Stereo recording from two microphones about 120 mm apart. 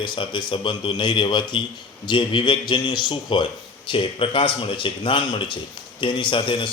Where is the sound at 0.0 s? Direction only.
40° left (ahead or behind).